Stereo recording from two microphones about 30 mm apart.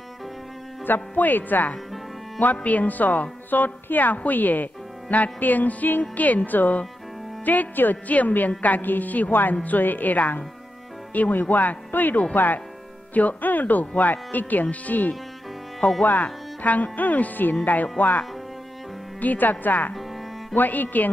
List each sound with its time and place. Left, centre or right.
0.8 s speech: left
2.4 s speech: left
5.1 s speech: left
8.1 s speech: left
13.1 s speech: left
18.0 s speech: left
19.2 s speech: left
20.5 s speech: left